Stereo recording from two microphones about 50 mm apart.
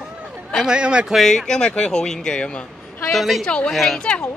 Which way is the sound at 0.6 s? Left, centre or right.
Centre.